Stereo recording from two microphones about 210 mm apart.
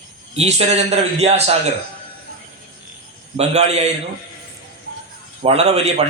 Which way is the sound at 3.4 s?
30° right (ahead or behind).